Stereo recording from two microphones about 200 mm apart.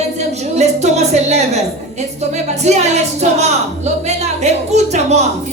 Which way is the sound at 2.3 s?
35° right (ahead or behind).